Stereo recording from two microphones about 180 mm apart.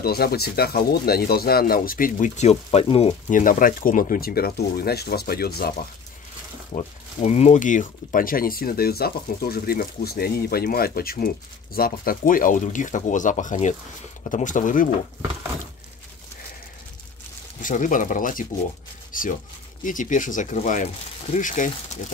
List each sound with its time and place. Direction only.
0.0 s speech: 60° left (ahead or behind); by 3.2 s 30° left (ahead or behind)
3.3 s speech: 50° left (ahead or behind)
6.7 s speech: 40° left (ahead or behind)
17.6 s speech: 45° left (ahead or behind)